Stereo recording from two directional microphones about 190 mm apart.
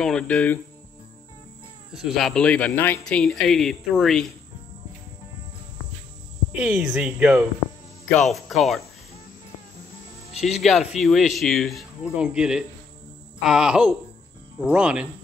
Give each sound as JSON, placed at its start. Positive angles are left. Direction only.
{"t": 0.0, "sound": "speech", "side_deg": 5}
{"t": 1.9, "sound": "speech", "side_deg": 0}
{"t": 6.5, "sound": "speech", "side_deg": -5}
{"t": 10.4, "sound": "speech", "side_deg": 0}